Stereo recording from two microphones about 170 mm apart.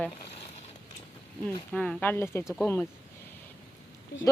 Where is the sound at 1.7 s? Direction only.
5° left (ahead or behind).